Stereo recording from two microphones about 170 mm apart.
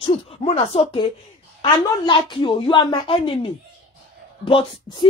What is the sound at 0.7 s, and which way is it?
A woman's voice, 35° left (ahead or behind).